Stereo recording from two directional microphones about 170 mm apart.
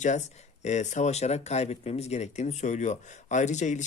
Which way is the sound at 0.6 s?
45° left (ahead or behind).